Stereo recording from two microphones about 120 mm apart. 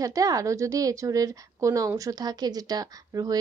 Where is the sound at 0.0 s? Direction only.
30° right (ahead or behind).